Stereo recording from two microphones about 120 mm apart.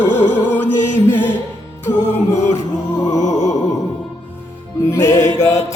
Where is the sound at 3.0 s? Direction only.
75° left (ahead or behind).